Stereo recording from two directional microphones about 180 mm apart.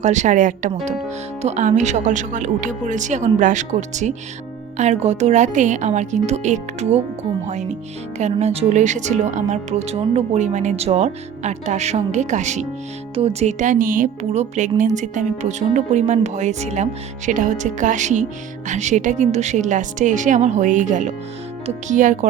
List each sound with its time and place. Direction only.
0.0 s speech: 40° right (ahead or behind)